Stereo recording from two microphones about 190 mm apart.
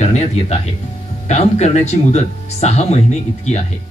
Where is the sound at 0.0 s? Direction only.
35° left (ahead or behind).